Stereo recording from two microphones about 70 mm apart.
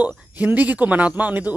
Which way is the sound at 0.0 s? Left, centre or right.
Right.